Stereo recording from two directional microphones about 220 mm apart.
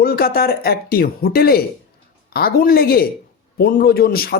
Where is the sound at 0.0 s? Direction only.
45° left (ahead or behind).